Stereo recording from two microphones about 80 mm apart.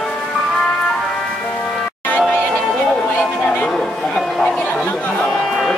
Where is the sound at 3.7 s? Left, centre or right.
Centre.